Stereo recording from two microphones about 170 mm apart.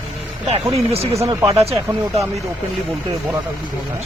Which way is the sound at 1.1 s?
15° right (ahead or behind).